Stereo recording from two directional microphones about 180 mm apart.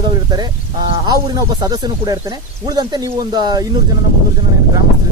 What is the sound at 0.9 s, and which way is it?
Speech, 25° right (ahead or behind).